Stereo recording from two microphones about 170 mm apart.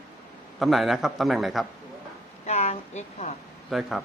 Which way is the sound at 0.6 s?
Centre (ahead or behind).